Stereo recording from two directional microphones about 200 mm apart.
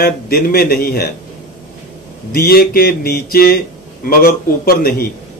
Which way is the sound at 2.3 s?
50° left (ahead or behind).